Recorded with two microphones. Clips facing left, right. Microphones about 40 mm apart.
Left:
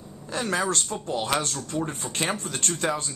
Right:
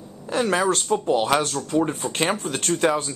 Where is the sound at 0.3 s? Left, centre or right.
Centre.